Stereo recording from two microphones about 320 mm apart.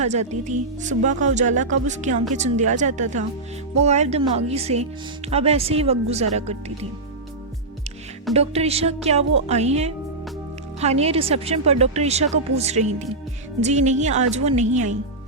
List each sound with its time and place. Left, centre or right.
0.0 s speech: right
8.3 s speech: centre